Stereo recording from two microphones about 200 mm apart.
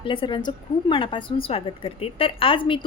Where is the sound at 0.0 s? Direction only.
25° left (ahead or behind).